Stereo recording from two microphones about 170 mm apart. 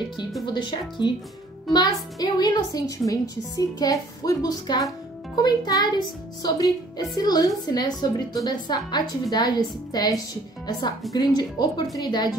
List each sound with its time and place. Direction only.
0.5 s a woman's voice: 25° left (ahead or behind)